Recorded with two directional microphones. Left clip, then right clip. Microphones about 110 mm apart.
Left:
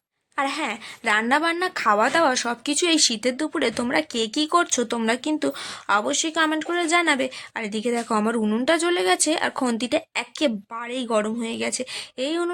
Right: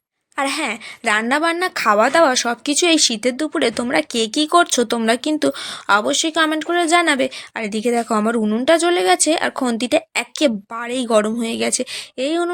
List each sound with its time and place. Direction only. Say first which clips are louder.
0.3 s a woman's voice: right 4 dB; 35° right (ahead or behind)